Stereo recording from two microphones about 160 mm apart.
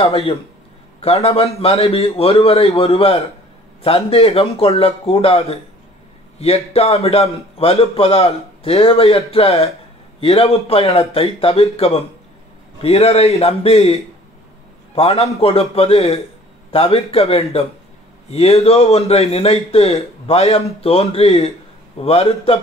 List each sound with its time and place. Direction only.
1.0 s a man's voice: 40° left (ahead or behind)
15.0 s a man's voice: 40° left (ahead or behind)